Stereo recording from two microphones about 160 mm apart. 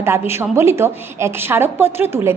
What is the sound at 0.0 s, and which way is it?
A woman's voice, 15° right (ahead or behind).